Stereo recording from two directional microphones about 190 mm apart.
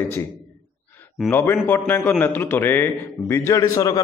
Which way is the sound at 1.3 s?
10° left (ahead or behind).